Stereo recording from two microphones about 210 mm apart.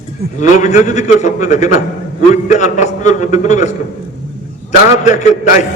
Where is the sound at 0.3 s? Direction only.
35° left (ahead or behind).